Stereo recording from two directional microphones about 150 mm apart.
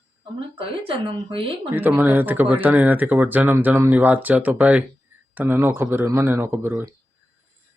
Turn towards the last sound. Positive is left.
turn(degrees=-15)  # may be behind; listen again after turning